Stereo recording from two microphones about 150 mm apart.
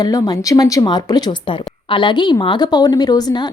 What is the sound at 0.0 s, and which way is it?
A woman's voice, 25° left (ahead or behind).